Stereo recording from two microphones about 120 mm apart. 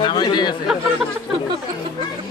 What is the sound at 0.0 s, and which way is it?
Chatter, 40° left (ahead or behind).